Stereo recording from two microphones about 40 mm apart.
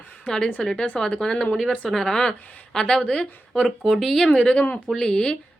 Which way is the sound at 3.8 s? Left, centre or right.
Centre.